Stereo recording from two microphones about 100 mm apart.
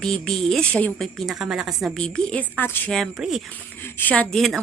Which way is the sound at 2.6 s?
20° left (ahead or behind).